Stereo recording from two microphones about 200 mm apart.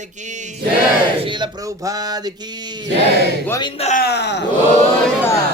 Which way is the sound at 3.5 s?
20° left (ahead or behind).